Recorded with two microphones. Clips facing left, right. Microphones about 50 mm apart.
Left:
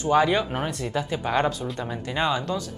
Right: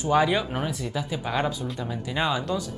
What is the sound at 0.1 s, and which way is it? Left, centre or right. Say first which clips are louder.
Speech: left 1 dB; centre.